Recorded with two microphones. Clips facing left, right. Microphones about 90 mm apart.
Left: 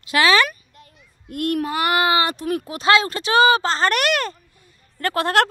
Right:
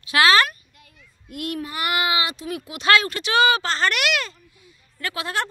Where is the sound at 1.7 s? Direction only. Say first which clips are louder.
Left 4 dB; 35° left (ahead or behind).